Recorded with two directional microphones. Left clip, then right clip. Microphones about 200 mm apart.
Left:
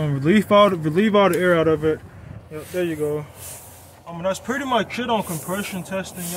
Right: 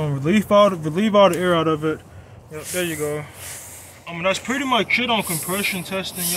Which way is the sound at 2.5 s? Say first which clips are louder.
Even; 25° left (ahead or behind).